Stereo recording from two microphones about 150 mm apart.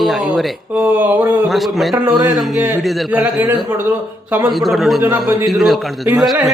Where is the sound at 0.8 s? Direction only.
10° right (ahead or behind).